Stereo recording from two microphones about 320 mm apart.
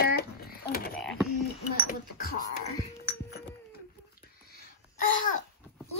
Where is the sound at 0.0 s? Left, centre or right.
Left.